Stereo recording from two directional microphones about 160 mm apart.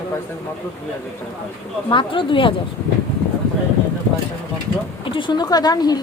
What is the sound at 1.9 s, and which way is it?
Speech, 30° left (ahead or behind).